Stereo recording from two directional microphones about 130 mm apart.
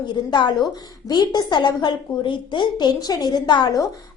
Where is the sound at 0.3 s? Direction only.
35° left (ahead or behind).